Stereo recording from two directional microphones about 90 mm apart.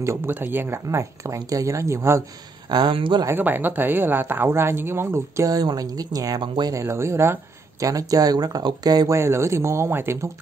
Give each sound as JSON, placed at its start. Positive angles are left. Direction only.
{"t": 0.0, "sound": "speech", "side_deg": -30}
{"t": 2.9, "sound": "speech", "side_deg": -70}
{"t": 3.3, "sound": "speech", "side_deg": -20}
{"t": 6.4, "sound": "speech", "side_deg": -60}
{"t": 6.7, "sound": "speech", "side_deg": -30}
{"t": 7.8, "sound": "speech", "side_deg": -40}
{"t": 9.1, "sound": "speech", "side_deg": -30}